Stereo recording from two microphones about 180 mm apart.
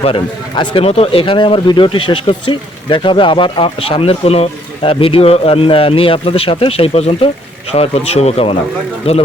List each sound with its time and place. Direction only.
0.0 s speech: 30° left (ahead or behind)